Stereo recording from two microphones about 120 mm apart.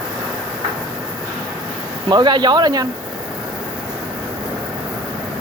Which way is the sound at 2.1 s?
35° right (ahead or behind).